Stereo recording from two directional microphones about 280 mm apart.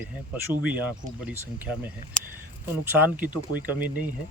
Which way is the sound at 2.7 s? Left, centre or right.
Centre.